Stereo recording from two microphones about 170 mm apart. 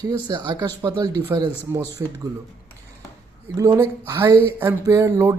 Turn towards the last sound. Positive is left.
turn(degrees=-15)  # may be behind; listen again after turning